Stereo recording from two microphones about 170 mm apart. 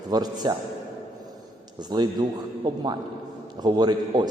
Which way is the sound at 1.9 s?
25° right (ahead or behind).